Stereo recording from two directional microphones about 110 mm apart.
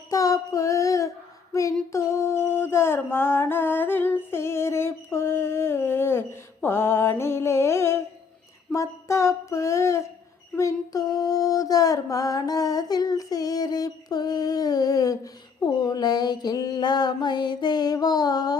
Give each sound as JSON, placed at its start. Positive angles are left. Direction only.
{"t": 0.1, "sound": "child singing", "side_deg": 30}
{"t": 1.9, "sound": "a sound", "side_deg": 25}
{"t": 10.6, "sound": "female singing", "side_deg": 30}